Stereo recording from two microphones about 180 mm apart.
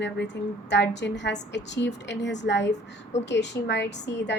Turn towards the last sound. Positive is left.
turn(degrees=75)  # may be behind; listen again after turning